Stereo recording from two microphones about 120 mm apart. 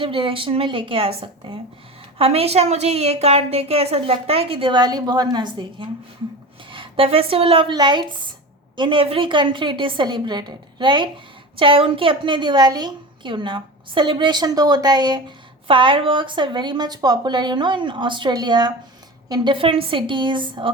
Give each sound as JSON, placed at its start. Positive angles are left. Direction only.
{"t": 0.0, "sound": "a woman's voice", "side_deg": -45}